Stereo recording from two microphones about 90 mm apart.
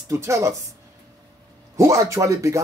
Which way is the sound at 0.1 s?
35° right (ahead or behind).